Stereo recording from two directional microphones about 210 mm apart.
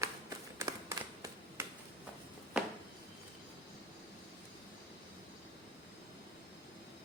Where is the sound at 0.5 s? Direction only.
15° right (ahead or behind).